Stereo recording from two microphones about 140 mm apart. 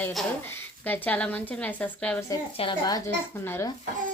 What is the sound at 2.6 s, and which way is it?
Speech, 45° left (ahead or behind).